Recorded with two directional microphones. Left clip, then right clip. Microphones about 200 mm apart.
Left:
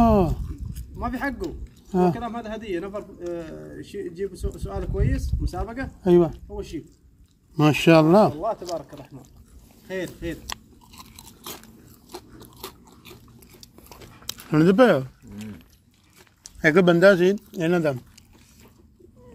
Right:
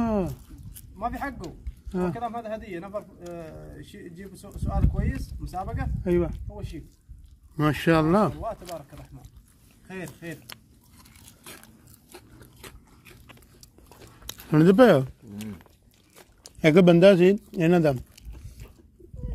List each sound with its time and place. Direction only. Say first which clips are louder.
0.0 s squish: left 8 dB; 20° left (ahead or behind)
0.9 s speech: left 2 dB; 5° right (ahead or behind)
1.9 s speech: left 8 dB; 15° left (ahead or behind)
2.1 s a man's voice: even; centre (ahead or behind)
6.0 s speech: left 7 dB; 15° left (ahead or behind)
6.5 s speech: left 8 dB; 5° right (ahead or behind)
7.5 s speech: left 6 dB; 5° left (ahead or behind); by 8.8 s 10° right (ahead or behind)
12.1 s biting: left 8 dB; 10° left (ahead or behind)
13.8 s a sound: left 5 dB; centre (ahead or behind)
14.5 s a man's voice: even; 15° right (ahead or behind)
15.0 s speech: right 2 dB; 30° right (ahead or behind)